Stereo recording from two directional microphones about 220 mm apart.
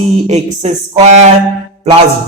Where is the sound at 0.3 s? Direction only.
30° right (ahead or behind).